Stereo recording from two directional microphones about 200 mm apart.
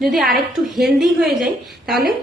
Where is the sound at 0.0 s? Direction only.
Centre (ahead or behind).